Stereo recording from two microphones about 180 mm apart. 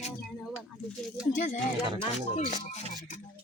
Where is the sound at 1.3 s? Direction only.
50° left (ahead or behind).